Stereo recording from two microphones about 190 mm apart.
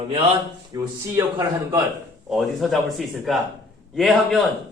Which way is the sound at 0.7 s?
20° right (ahead or behind).